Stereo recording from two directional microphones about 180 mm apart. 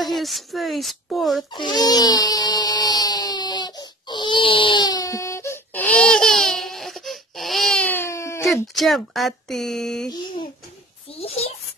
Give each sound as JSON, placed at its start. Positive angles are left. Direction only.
{"t": 0.0, "sound": "speech", "side_deg": 0}
{"t": 1.5, "sound": "baby cry", "side_deg": 25}
{"t": 8.7, "sound": "speech", "side_deg": 0}
{"t": 11.1, "sound": "a child's voice", "side_deg": 35}